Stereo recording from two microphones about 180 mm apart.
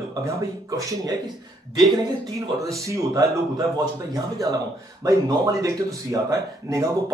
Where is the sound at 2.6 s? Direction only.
20° right (ahead or behind).